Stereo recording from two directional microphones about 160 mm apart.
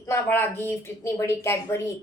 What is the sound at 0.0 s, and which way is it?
Speech, 15° left (ahead or behind).